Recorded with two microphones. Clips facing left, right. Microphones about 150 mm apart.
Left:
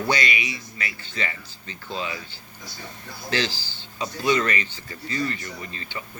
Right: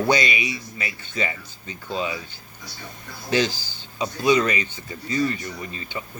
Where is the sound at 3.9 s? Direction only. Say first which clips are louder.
Right 3 dB; 15° right (ahead or behind).